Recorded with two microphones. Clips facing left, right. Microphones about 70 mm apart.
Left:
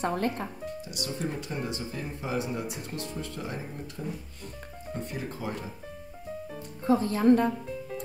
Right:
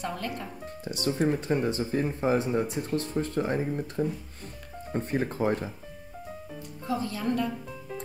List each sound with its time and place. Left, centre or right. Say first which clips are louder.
0.0 s speech: left 5 dB; left
0.8 s speech: right 10 dB; right
6.9 s speech: left 8 dB; left